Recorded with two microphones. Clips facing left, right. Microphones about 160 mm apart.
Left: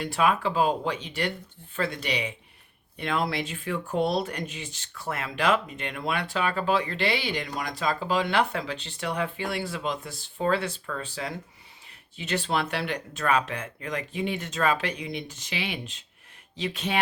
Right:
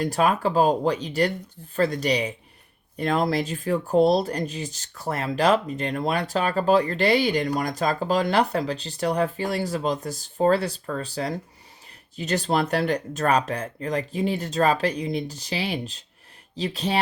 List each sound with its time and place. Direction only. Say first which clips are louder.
0.0 s speech: right 3 dB; 40° right (ahead or behind)